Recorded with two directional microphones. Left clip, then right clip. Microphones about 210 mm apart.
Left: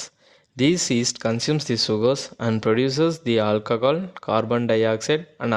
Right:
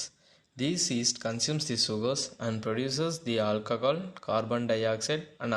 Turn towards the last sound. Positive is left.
turn(degrees=35)  # may be behind; listen again after turning